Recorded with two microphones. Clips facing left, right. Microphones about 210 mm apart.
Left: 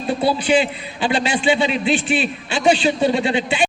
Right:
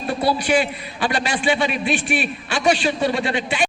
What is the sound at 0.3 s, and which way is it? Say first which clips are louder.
A man's voice: left 2 dB; 25° left (ahead or behind).